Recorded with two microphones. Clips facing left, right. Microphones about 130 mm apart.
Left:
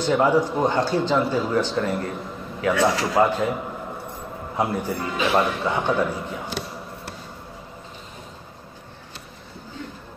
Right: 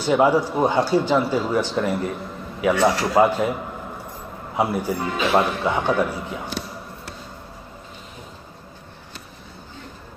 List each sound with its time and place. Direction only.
0.0 s a man's voice: 10° right (ahead or behind)
4.6 s a man's voice: 15° right (ahead or behind)